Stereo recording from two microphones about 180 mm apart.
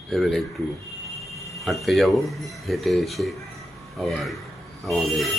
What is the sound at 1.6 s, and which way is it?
A man's voice, centre (ahead or behind).